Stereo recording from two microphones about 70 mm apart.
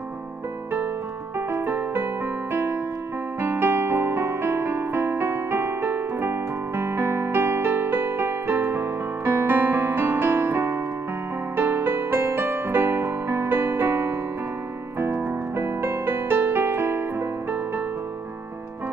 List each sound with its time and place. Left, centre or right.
1.5 s music: right